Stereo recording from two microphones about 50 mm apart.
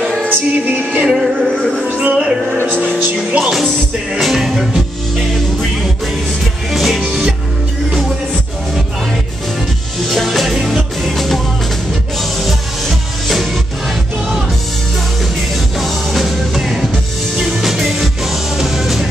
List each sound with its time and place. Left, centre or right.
0.5 s music: right
1.1 s music: centre
2.0 s speech: centre
3.3 s music: centre
6.7 s music: centre
10.0 s music: centre
15.8 s music: centre